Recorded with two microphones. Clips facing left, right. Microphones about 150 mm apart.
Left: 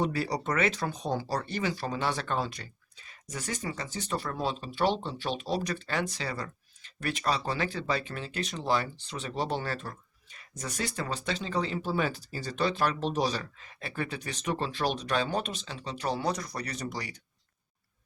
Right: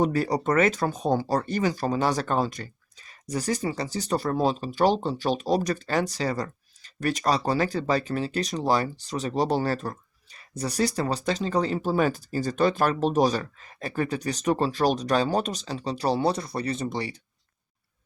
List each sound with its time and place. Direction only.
0.0 s speech: 45° right (ahead or behind); by 17.2 s 25° right (ahead or behind)